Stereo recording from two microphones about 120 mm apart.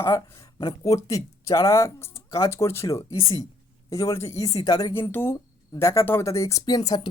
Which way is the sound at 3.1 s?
50° left (ahead or behind).